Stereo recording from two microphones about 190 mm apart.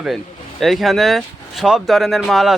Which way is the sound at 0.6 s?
Centre (ahead or behind).